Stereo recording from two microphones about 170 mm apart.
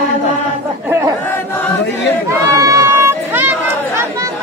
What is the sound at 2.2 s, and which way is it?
Crowd, 20° right (ahead or behind).